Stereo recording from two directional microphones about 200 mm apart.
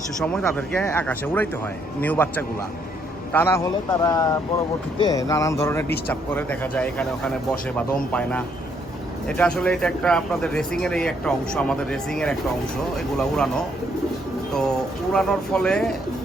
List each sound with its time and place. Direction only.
0.2 s speech: 5° left (ahead or behind)
14.5 s speech: 5° left (ahead or behind)